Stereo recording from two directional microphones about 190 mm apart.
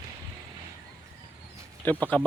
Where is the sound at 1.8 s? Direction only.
10° left (ahead or behind).